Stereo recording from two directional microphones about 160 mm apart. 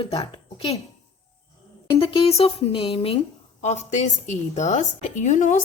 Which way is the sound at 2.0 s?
35° left (ahead or behind).